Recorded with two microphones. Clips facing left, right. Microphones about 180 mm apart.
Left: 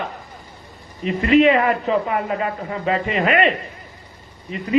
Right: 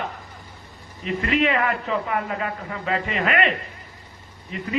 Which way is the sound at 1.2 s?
25° left (ahead or behind).